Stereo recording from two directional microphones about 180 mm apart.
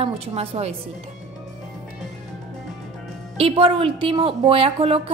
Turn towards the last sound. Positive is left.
turn(degrees=-30)  # may be behind; listen again after turning